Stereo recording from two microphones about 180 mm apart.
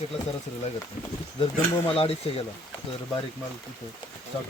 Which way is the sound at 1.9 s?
35° left (ahead or behind).